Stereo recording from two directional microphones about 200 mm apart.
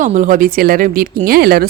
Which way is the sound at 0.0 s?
40° right (ahead or behind).